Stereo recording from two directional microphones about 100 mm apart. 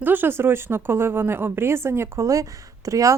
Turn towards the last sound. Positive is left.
turn(degrees=-35)  # may be behind; listen again after turning